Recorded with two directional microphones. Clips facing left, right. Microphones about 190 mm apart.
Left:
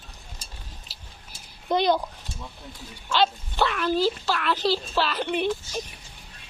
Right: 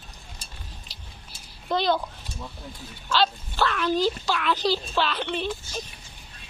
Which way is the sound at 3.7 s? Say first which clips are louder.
Right 1 dB; 5° left (ahead or behind).